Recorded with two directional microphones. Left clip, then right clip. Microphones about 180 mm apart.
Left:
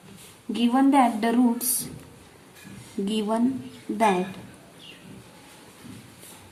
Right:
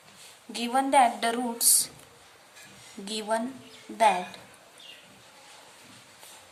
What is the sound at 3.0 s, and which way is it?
Speech, 25° right (ahead or behind).